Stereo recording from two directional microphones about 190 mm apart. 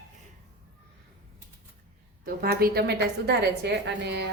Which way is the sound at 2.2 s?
50° right (ahead or behind).